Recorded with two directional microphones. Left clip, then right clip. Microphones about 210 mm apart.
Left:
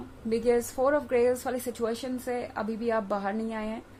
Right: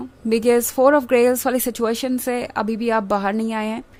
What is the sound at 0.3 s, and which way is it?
Speech, 50° right (ahead or behind).